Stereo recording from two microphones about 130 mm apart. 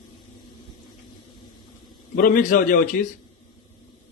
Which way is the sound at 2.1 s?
90° left.